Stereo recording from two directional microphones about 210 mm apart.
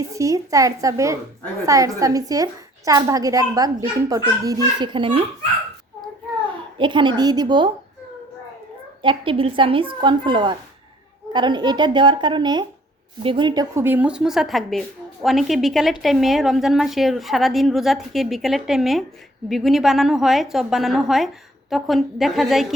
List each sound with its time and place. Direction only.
0.1 s a woman's voice: 15° right (ahead or behind)
6.7 s a woman's voice: 20° right (ahead or behind)
9.0 s a woman's voice: 25° right (ahead or behind); by 22.6 s centre (ahead or behind)